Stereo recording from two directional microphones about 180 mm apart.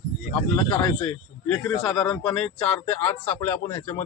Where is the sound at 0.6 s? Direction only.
30° left (ahead or behind).